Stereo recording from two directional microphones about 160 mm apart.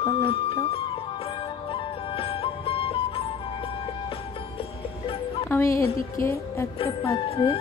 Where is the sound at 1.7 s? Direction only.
35° left (ahead or behind).